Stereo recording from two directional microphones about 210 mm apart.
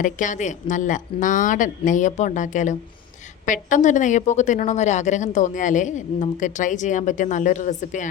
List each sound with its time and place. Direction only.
0.0 s a woman's voice: 35° left (ahead or behind)